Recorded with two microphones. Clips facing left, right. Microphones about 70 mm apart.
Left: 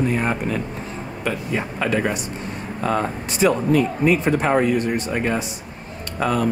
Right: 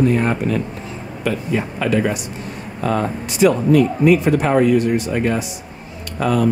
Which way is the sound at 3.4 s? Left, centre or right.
Centre.